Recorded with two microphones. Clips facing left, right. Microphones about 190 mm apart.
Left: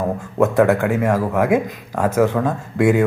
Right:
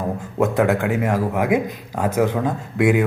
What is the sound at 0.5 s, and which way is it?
Speech, 20° right (ahead or behind).